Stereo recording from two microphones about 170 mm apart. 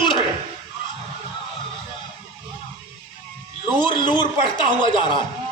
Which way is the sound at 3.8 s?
30° left (ahead or behind).